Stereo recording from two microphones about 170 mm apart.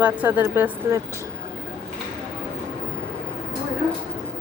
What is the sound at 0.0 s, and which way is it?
A woman's voice, 10° right (ahead or behind).